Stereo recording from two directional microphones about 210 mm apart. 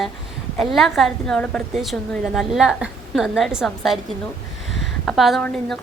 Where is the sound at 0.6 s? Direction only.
Centre (ahead or behind).